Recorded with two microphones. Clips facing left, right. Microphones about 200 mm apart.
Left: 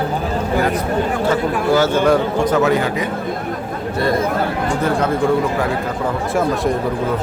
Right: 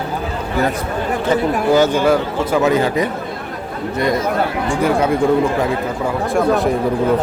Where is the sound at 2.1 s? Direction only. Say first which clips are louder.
Left 1 dB; 5° right (ahead or behind).